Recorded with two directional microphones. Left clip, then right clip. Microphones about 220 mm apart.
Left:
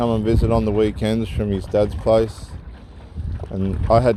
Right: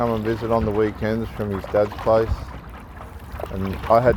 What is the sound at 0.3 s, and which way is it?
Speech, 45° left (ahead or behind).